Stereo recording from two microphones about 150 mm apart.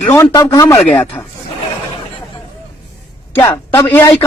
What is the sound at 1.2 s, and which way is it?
Speech, 15° left (ahead or behind).